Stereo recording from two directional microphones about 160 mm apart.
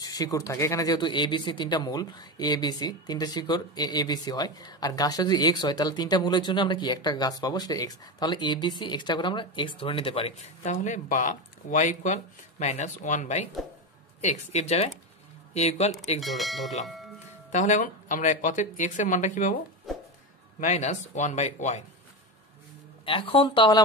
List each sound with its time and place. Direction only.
0.0 s speech: 20° left (ahead or behind); by 15.9 s 40° left (ahead or behind)
16.2 s speech: centre (ahead or behind)
17.5 s speech: 50° left (ahead or behind)
20.6 s speech: 45° left (ahead or behind)
23.0 s speech: 35° left (ahead or behind)